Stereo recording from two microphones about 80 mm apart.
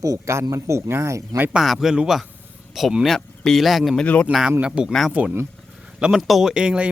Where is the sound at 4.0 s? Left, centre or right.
Centre.